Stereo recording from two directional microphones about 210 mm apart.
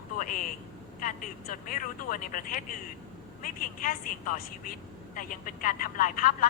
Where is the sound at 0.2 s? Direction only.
40° left (ahead or behind).